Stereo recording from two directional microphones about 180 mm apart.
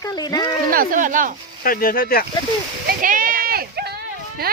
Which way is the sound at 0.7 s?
50° right (ahead or behind).